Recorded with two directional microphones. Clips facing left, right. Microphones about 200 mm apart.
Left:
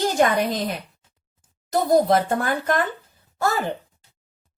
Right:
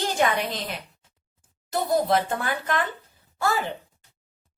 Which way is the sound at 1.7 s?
40° left (ahead or behind).